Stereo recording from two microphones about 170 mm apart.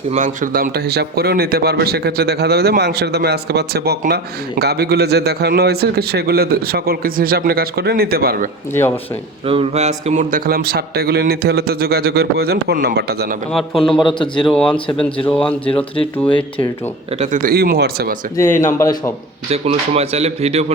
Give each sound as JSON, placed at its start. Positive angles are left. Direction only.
{"t": 0.1, "sound": "a man's voice", "side_deg": -50}
{"t": 9.5, "sound": "a man's voice", "side_deg": -35}
{"t": 13.5, "sound": "a man's voice", "side_deg": 0}
{"t": 14.0, "sound": "speech", "side_deg": 30}
{"t": 14.4, "sound": "a man's voice", "side_deg": 0}
{"t": 15.6, "sound": "speech", "side_deg": 30}
{"t": 17.2, "sound": "speech", "side_deg": -50}
{"t": 17.5, "sound": "a man's voice", "side_deg": -70}
{"t": 18.3, "sound": "a man's voice", "side_deg": 15}
{"t": 19.5, "sound": "speech", "side_deg": -35}